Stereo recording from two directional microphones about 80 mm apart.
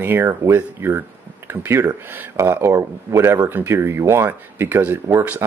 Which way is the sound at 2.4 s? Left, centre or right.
Right.